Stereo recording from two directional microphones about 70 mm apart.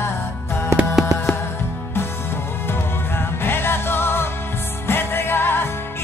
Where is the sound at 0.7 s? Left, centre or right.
Right.